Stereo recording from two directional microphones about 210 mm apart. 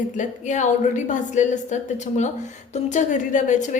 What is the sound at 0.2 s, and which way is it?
A woman's voice, 35° left (ahead or behind).